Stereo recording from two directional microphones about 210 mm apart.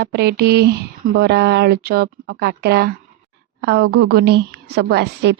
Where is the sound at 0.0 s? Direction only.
50° right (ahead or behind).